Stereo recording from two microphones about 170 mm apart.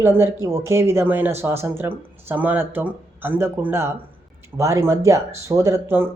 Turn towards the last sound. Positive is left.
turn(degrees=-15)  # may be behind; listen again after turning